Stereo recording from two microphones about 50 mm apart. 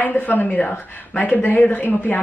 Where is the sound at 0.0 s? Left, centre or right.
Left.